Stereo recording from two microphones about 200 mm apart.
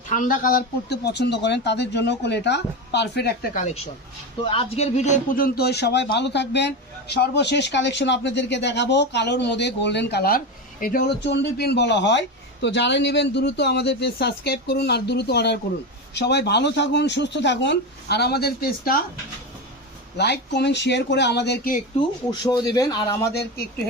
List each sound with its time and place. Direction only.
0.1 s a man's voice: 40° left (ahead or behind)
4.4 s a man's voice: 30° left (ahead or behind); by 19.0 s 45° left (ahead or behind)
20.1 s a man's voice: 55° left (ahead or behind)
22.3 s speech: 20° left (ahead or behind)